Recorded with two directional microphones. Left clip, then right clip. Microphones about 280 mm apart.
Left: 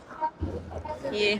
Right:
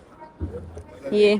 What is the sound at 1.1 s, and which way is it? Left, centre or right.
Speech, centre.